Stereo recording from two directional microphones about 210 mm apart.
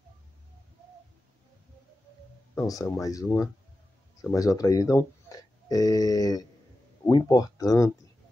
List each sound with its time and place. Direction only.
2.5 s speech: 15° left (ahead or behind)